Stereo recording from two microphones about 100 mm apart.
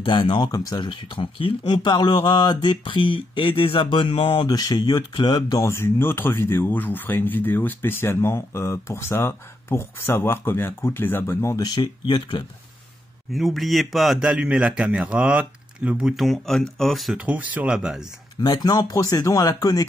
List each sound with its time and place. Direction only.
0.0 s speech: 55° left (ahead or behind); by 0.8 s 40° left (ahead or behind)
0.8 s speech: 60° left (ahead or behind)
4.5 s speech: 35° left (ahead or behind)
5.6 s speech: 25° left (ahead or behind)
11.5 s speech: 40° left (ahead or behind)
11.8 s speech: 55° left (ahead or behind)
13.3 s speech: centre (ahead or behind)
17.2 s speech: 15° right (ahead or behind)
18.4 s speech: 40° left (ahead or behind)